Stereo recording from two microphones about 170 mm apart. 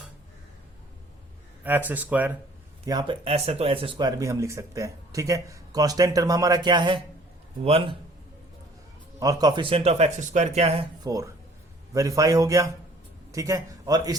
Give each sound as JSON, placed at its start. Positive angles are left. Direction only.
{"t": 1.6, "sound": "speech", "side_deg": -10}
{"t": 2.8, "sound": "speech", "side_deg": -25}
{"t": 9.2, "sound": "speech", "side_deg": -25}
{"t": 11.0, "sound": "speech", "side_deg": -20}